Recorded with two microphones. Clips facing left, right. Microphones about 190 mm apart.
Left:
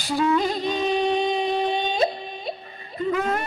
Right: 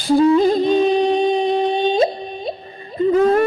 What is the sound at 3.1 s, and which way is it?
Speech, 35° right (ahead or behind).